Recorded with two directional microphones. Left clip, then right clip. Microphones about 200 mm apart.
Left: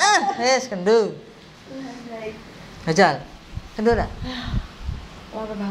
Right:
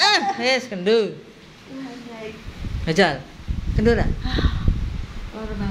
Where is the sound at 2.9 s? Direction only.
30° right (ahead or behind).